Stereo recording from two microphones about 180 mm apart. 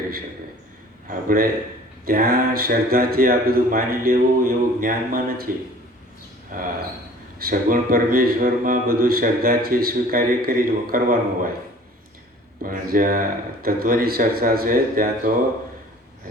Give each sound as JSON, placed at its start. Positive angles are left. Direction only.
{"t": 1.0, "sound": "speech", "side_deg": -50}
{"t": 6.5, "sound": "speech", "side_deg": -50}
{"t": 12.6, "sound": "speech", "side_deg": -50}